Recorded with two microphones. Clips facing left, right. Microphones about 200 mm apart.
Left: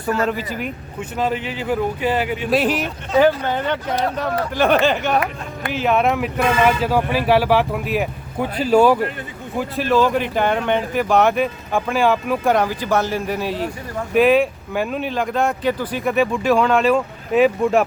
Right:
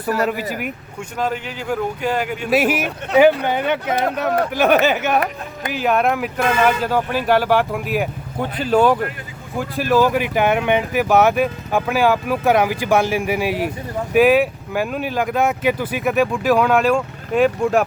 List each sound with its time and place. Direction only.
0.0 s speech: 10° right (ahead or behind)
1.6 s speech: 5° left (ahead or behind)
2.5 s speech: 5° right (ahead or behind)
3.9 s speech: 55° right (ahead or behind)
4.5 s speech: 5° right (ahead or behind)